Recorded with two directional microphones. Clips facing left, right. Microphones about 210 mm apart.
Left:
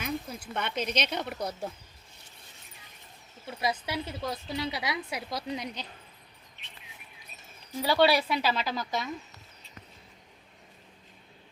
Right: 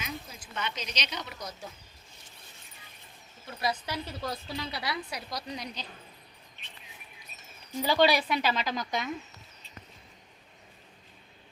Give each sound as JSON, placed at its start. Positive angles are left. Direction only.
{"t": 0.0, "sound": "speech", "side_deg": 60}
{"t": 3.6, "sound": "speech", "side_deg": 20}
{"t": 5.3, "sound": "speech", "side_deg": 25}
{"t": 7.8, "sound": "a woman's voice", "side_deg": 5}